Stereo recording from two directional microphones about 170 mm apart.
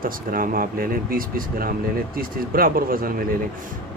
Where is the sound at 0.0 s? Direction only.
55° right (ahead or behind).